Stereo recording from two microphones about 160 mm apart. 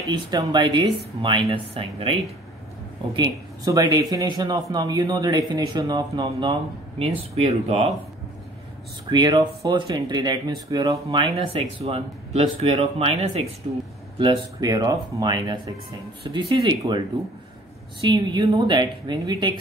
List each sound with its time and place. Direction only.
0.0 s speech: 25° right (ahead or behind)
3.1 s speech: 25° right (ahead or behind)
7.0 s speech: 40° right (ahead or behind)
9.1 s speech: 30° right (ahead or behind)
11.1 s speech: 40° right (ahead or behind)
14.1 s speech: 30° right (ahead or behind)
18.0 s speech: 30° right (ahead or behind)